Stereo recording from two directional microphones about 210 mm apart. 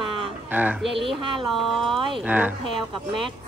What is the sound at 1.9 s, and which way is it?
Speech, 25° right (ahead or behind).